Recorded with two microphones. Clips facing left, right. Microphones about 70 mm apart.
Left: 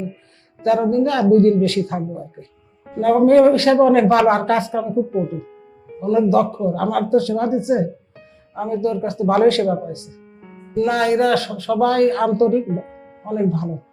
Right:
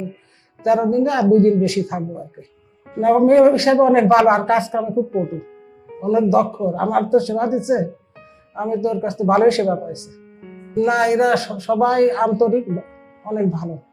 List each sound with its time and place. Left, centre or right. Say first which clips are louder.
0.6 s speech: even; centre
6.0 s speech: even; right